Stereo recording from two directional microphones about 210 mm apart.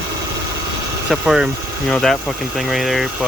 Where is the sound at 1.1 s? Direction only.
Centre (ahead or behind).